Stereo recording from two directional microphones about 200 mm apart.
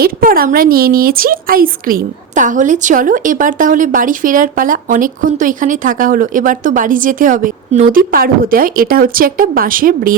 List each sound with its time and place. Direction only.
0.0 s a woman's voice: 45° right (ahead or behind)